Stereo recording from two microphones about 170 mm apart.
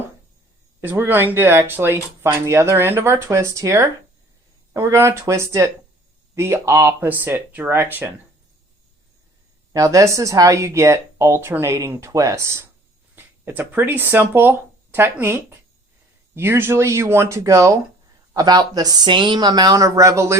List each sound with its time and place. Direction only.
0.8 s speech: 10° right (ahead or behind)
9.7 s speech: 20° right (ahead or behind)